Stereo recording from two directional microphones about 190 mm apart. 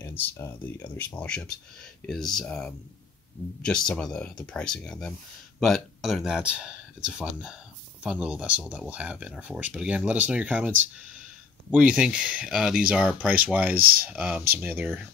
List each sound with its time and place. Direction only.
0.0 s a sound: 10° left (ahead or behind)
0.9 s speech: 5° left (ahead or behind)
11.7 s speech: 5° right (ahead or behind)
13.7 s speech: 50° right (ahead or behind)
14.0 s speech: 5° right (ahead or behind)